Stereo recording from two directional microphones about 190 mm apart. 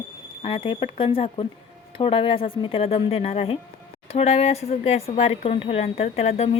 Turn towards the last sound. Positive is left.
turn(degrees=35)  # may be behind; listen again after turning